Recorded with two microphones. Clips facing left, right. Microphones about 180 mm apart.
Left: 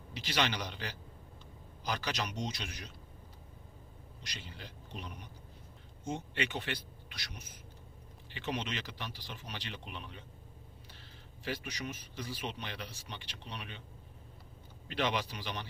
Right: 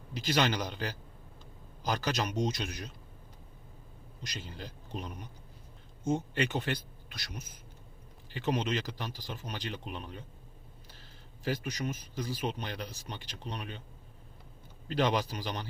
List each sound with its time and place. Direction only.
0.1 s speech: 45° right (ahead or behind)
4.2 s speech: 45° right (ahead or behind)
11.4 s a man's voice: 40° right (ahead or behind)
14.8 s a man's voice: 40° right (ahead or behind)